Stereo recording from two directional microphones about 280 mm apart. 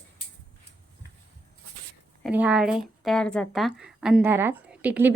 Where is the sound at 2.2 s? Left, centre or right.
Centre.